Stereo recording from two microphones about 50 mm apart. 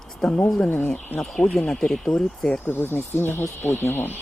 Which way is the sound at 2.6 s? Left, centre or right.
Left.